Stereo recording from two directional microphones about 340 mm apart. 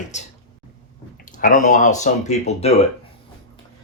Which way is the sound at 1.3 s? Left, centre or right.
Left.